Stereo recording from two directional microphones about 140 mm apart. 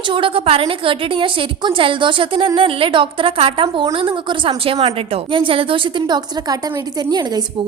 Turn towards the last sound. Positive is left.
turn(degrees=-30)  # may be behind; listen again after turning